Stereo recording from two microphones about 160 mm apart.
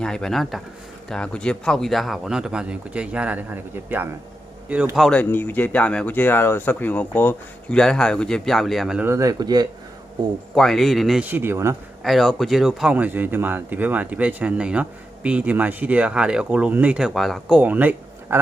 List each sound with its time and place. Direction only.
0.0 s speech: 5° left (ahead or behind); by 4.1 s 10° right (ahead or behind)
4.9 s speech: centre (ahead or behind)
5.2 s speech: 10° left (ahead or behind)
9.0 s speech: 20° right (ahead or behind)
10.5 s speech: centre (ahead or behind)
11.3 s speech: 15° right (ahead or behind)
12.0 s speech: centre (ahead or behind)
17.6 s speech: 10° right (ahead or behind)